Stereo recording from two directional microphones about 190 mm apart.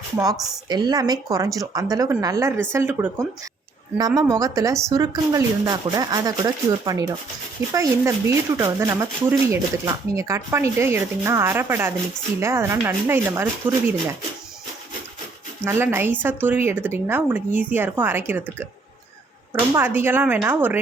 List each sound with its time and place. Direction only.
0.3 s a woman's voice: centre (ahead or behind)
0.7 s a woman's voice: 20° right (ahead or behind)
15.6 s speech: 15° right (ahead or behind)
19.7 s speech: 10° right (ahead or behind)